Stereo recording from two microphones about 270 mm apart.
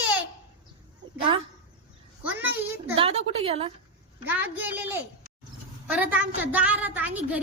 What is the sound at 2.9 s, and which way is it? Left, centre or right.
Speech, right.